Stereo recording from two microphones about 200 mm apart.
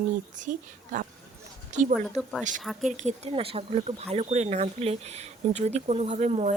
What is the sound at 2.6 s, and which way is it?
Speech, centre (ahead or behind).